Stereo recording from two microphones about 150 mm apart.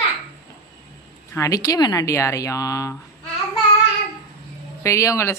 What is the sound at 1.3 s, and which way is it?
Speech, 20° left (ahead or behind).